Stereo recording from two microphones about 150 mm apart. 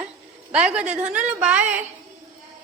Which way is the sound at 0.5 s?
5° right (ahead or behind).